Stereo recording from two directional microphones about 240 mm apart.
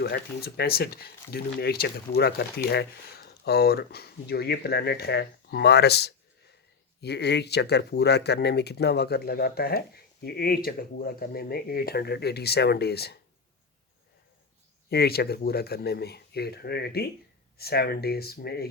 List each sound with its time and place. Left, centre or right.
0.0 s speech: left
14.8 s speech: left